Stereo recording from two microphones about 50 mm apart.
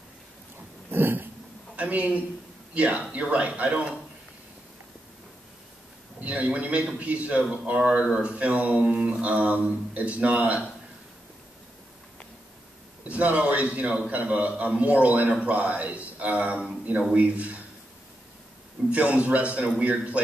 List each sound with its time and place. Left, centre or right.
0.8 s a sound: right
1.8 s a man's voice: right
6.2 s a man's voice: right
8.8 s a man's voice: centre
13.1 s a man's voice: right
18.9 s a man's voice: right